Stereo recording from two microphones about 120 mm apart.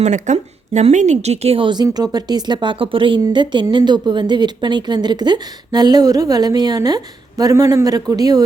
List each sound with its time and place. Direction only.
0.0 s a woman's voice: 75° right (ahead or behind); by 8.4 s 30° right (ahead or behind)